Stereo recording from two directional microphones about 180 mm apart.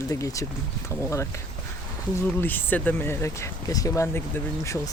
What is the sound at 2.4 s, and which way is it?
Speech, 10° left (ahead or behind).